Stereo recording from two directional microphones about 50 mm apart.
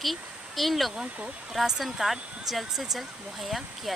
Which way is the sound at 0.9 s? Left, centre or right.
Centre.